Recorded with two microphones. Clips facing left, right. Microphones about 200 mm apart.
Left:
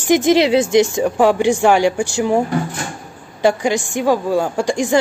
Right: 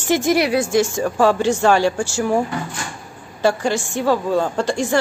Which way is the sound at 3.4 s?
15° left (ahead or behind).